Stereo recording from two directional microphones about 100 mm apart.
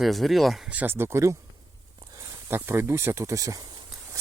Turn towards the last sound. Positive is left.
turn(degrees=-35)  # may be behind; listen again after turning